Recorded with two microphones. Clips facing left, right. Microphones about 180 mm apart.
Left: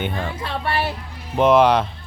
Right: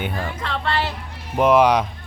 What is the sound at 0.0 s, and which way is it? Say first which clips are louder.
Speech: left 1 dB; 5° right (ahead or behind).